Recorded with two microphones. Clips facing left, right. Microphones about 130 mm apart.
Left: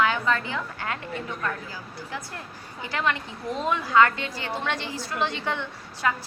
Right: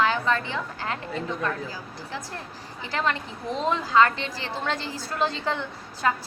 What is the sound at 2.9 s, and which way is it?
A woman's voice, 30° right (ahead or behind).